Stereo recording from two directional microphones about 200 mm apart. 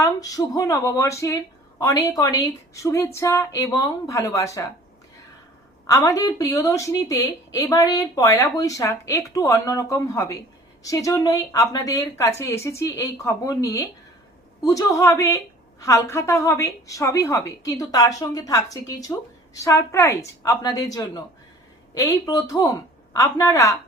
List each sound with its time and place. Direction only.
0.0 s a woman's voice: 15° left (ahead or behind)
5.8 s a woman's voice: 15° left (ahead or behind)